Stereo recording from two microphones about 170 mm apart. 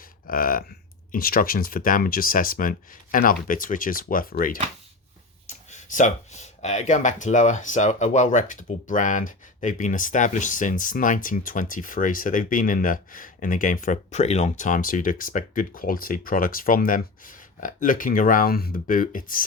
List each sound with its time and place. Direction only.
0.3 s speech: 55° left (ahead or behind)
5.5 s speech: 45° left (ahead or behind)